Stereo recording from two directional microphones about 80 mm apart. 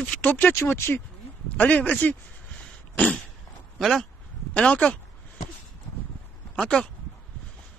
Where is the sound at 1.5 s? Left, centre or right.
Left.